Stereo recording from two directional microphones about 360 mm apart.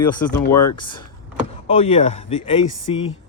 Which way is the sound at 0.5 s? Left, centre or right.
Left.